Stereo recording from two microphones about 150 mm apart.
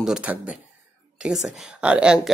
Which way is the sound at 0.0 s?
5° right (ahead or behind).